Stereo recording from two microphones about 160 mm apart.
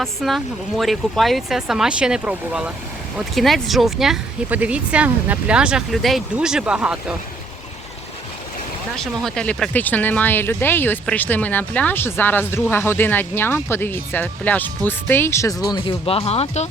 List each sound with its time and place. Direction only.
0.0 s speech: centre (ahead or behind)
9.2 s speech: 5° left (ahead or behind); by 16.6 s 40° left (ahead or behind)